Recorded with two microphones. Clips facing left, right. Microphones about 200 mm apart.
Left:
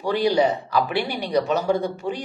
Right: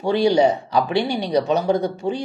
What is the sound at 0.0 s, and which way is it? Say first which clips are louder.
Speech: right 3 dB; 25° right (ahead or behind).